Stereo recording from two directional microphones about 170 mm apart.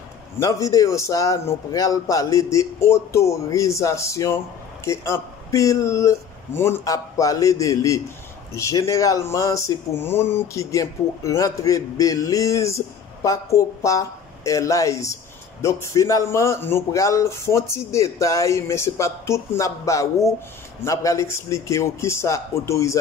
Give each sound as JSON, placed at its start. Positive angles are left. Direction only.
{"t": 0.4, "sound": "speech", "side_deg": 20}